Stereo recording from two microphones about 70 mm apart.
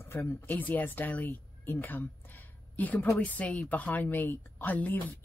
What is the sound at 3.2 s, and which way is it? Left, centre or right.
Speech, centre.